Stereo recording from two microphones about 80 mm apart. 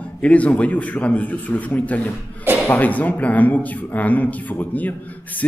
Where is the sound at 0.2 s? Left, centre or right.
Centre.